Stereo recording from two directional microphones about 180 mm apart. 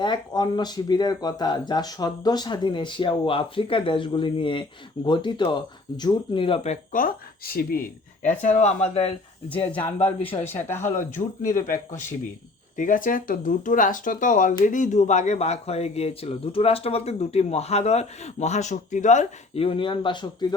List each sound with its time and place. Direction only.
0.0 s speech: 25° left (ahead or behind); by 7.8 s 55° left (ahead or behind)
8.2 s speech: 40° left (ahead or behind)
9.5 s speech: 10° left (ahead or behind)
10.2 s speech: 30° left (ahead or behind)
10.5 s speech: 15° left (ahead or behind)
10.9 s speech: 45° left (ahead or behind)
19.6 s speech: 30° left (ahead or behind)